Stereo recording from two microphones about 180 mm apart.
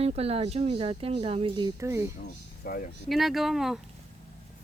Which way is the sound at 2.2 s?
55° left (ahead or behind).